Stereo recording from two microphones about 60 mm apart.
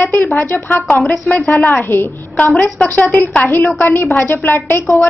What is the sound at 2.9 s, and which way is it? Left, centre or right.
A woman's voice, left.